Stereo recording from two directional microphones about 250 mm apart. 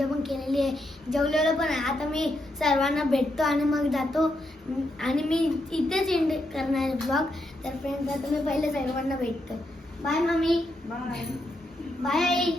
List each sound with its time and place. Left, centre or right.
0.0 s child singing: centre
12.0 s child singing: centre